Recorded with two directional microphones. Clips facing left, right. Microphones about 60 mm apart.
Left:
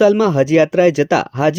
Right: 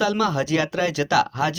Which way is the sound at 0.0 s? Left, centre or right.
Left.